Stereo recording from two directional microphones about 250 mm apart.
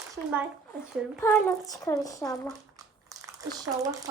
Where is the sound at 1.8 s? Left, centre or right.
Centre.